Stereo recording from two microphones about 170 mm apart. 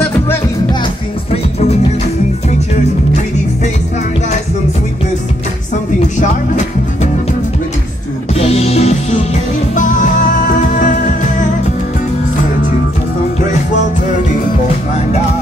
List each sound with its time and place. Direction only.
6.2 s music: 45° left (ahead or behind)
8.4 s music: 35° left (ahead or behind)